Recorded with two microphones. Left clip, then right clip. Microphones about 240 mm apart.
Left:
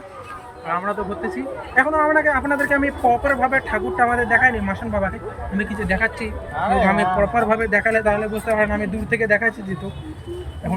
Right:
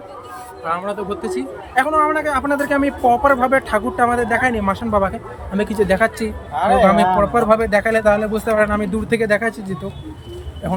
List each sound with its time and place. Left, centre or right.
0.7 s speech: centre
6.6 s speech: right
6.8 s speech: centre